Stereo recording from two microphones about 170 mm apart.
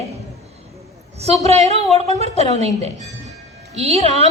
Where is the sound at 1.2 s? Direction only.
40° right (ahead or behind).